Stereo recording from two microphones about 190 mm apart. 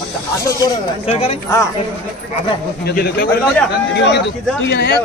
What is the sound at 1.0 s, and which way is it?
Speech, 30° left (ahead or behind).